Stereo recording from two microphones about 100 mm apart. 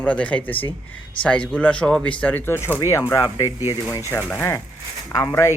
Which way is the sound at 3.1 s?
35° left (ahead or behind).